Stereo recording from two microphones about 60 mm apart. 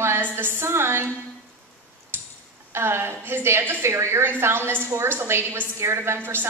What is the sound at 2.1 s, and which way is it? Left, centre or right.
Tick-tock, right.